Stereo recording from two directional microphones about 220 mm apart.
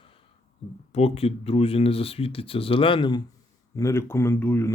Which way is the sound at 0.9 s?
25° left (ahead or behind).